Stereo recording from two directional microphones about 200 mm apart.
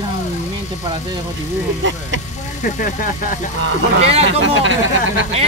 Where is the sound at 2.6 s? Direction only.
40° left (ahead or behind).